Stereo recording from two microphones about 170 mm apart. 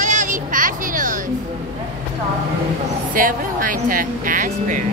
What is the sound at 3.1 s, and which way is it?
Music, 55° right (ahead or behind).